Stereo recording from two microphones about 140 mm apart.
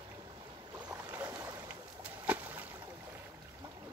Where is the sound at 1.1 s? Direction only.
15° right (ahead or behind).